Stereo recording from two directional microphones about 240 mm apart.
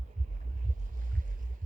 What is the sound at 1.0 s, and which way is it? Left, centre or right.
Boat, right.